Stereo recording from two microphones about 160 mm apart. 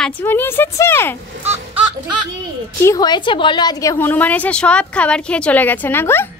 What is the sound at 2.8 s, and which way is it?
A woman's voice, 20° left (ahead or behind).